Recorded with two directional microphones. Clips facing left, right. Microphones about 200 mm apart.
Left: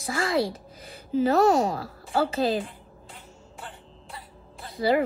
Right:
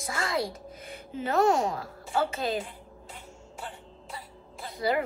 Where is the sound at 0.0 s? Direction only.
30° left (ahead or behind).